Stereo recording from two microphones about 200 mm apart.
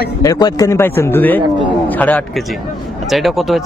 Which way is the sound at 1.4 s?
25° right (ahead or behind).